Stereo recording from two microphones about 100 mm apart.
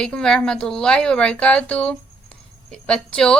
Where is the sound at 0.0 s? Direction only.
5° left (ahead or behind).